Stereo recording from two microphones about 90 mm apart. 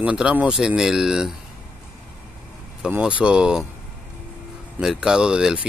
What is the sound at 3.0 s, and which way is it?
Speech, 10° right (ahead or behind).